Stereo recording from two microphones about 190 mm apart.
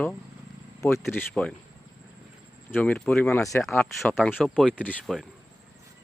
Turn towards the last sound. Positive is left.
turn(degrees=0)  # may be behind; listen again after turning